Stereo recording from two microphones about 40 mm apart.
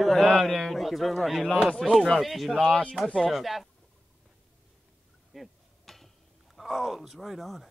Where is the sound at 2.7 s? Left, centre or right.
Left.